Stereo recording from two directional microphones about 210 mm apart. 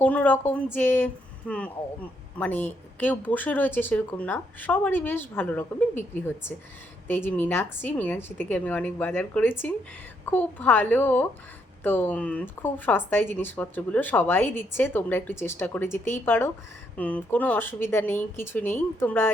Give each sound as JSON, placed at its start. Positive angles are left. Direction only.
{"t": 0.0, "sound": "speech", "side_deg": 10}
{"t": 7.1, "sound": "speech", "side_deg": 10}